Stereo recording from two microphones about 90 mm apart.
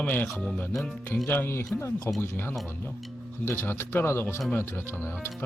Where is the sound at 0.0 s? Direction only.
20° left (ahead or behind).